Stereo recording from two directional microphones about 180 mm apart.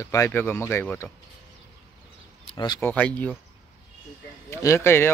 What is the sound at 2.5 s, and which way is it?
Speech, 25° left (ahead or behind).